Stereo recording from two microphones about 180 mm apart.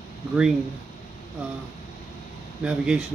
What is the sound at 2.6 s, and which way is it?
Speech, 5° right (ahead or behind).